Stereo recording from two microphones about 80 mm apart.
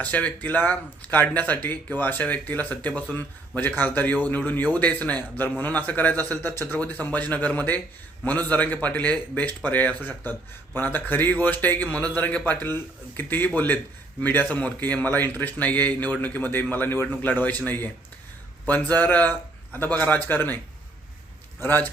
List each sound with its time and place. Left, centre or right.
0.0 s speech: centre
6.7 s speech: centre
21.6 s speech: left